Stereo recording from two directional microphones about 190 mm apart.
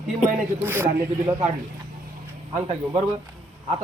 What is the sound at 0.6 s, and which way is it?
Speech, 10° right (ahead or behind).